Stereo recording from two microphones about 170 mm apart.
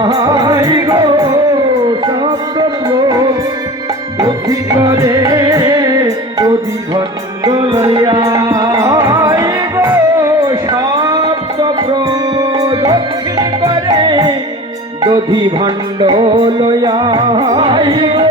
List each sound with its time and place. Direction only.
0.0 s music: 30° right (ahead or behind)
2.6 s music: 25° right (ahead or behind)
4.2 s music: 20° right (ahead or behind)
12.5 s music: 20° right (ahead or behind)